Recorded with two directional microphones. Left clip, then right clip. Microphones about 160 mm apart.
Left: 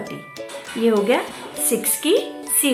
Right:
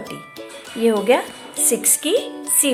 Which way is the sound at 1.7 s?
45° right (ahead or behind).